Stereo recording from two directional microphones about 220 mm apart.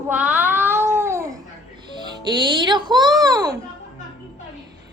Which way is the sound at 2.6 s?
20° right (ahead or behind).